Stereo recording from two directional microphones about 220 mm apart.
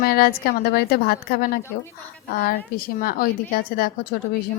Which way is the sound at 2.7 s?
40° left (ahead or behind).